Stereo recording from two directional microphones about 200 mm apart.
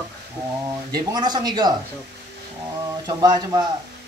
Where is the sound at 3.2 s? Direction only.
20° right (ahead or behind).